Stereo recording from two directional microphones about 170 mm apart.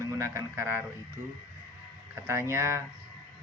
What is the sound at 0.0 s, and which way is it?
Speech, 15° right (ahead or behind).